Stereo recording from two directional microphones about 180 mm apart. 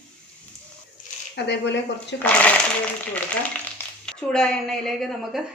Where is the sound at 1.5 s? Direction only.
75° left (ahead or behind).